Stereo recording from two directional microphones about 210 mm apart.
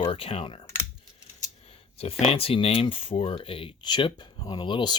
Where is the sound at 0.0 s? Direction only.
25° left (ahead or behind).